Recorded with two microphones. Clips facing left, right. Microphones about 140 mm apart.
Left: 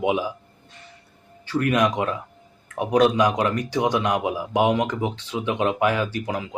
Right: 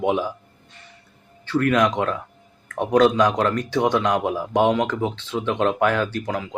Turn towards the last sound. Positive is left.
turn(degrees=15)  # may be behind; listen again after turning